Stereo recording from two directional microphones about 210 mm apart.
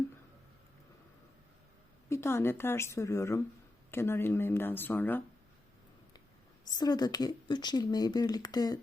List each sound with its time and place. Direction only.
2.0 s speech: 10° left (ahead or behind)
6.7 s speech: 20° left (ahead or behind)